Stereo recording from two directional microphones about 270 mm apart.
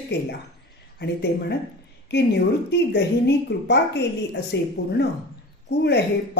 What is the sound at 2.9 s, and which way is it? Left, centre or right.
A woman's voice, left.